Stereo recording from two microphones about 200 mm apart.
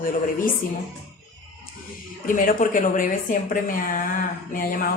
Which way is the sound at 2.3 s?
40° left (ahead or behind).